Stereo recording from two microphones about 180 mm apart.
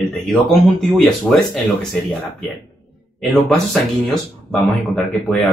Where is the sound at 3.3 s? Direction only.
Centre (ahead or behind).